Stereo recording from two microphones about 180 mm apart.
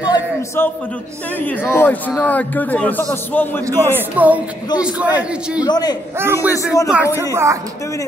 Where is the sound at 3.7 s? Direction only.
10° right (ahead or behind).